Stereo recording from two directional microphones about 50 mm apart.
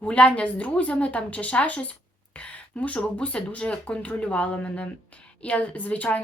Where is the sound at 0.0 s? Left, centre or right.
Left.